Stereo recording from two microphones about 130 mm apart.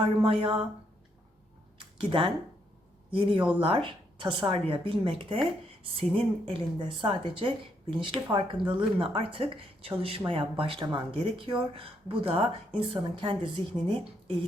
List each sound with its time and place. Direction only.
0.2 s speech: 45° right (ahead or behind)
2.0 s a woman's voice: 40° right (ahead or behind)